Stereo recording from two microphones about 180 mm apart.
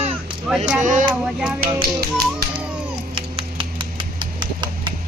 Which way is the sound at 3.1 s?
30° right (ahead or behind).